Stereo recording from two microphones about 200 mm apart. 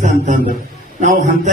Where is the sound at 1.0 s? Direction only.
40° right (ahead or behind).